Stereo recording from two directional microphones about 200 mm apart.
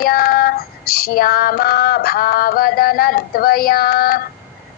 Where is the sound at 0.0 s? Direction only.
50° left (ahead or behind).